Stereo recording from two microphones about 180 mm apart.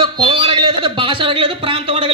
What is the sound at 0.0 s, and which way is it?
A man's voice, 25° right (ahead or behind).